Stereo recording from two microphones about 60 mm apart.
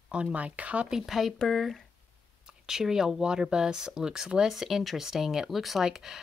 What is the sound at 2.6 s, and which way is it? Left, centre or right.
Speech, centre.